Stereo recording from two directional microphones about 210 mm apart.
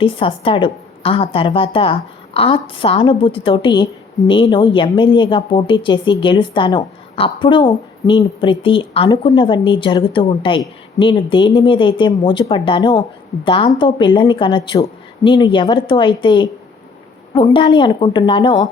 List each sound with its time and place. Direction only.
0.0 s speech: 25° left (ahead or behind)